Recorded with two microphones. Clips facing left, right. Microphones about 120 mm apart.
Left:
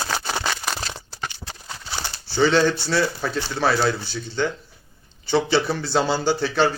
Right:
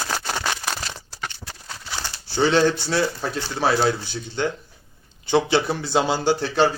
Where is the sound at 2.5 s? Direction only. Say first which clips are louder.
Right 2 dB; 5° right (ahead or behind).